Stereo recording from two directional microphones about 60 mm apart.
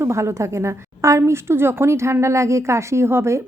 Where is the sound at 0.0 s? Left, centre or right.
Right.